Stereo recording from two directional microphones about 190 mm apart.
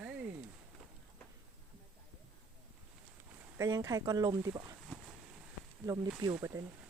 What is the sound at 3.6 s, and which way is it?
Speech, 20° right (ahead or behind).